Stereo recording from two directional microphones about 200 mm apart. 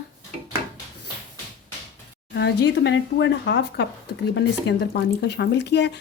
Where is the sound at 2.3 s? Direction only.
60° left (ahead or behind).